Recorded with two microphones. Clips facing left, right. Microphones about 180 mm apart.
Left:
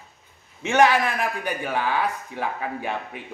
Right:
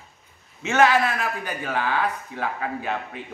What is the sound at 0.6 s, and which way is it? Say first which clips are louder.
A man's voice: even; 15° left (ahead or behind).